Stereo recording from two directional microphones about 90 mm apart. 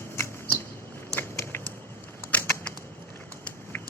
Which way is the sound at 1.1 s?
30° left (ahead or behind).